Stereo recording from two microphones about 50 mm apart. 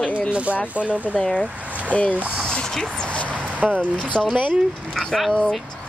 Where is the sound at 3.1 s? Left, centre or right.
Left.